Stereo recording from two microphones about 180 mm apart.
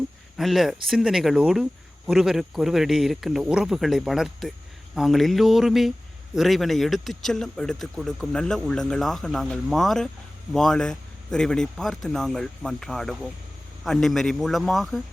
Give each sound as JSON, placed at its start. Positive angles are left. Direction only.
{"t": 0.3, "sound": "speech", "side_deg": 0}